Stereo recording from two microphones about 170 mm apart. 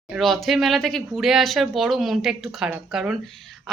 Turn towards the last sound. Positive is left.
turn(degrees=0)  # may be behind; listen again after turning